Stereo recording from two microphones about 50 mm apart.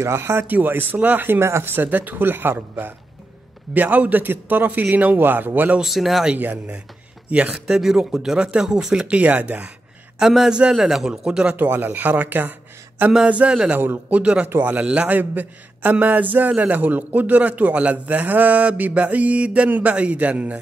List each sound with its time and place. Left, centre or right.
0.0 s speech: right
0.5 s a man's voice: right
1.4 s speech: right
1.9 s a man's voice: right
5.9 s speech: centre
7.2 s speech: right
7.5 s a man's voice: centre; by 9.7 s right
10.1 s speech: centre
11.2 s speech: centre
11.5 s a man's voice: right
13.3 s a man's voice: right